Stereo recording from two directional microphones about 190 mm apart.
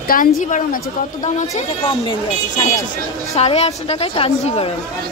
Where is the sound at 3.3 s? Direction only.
35° left (ahead or behind).